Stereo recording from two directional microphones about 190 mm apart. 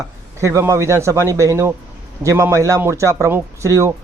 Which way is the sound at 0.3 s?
15° right (ahead or behind).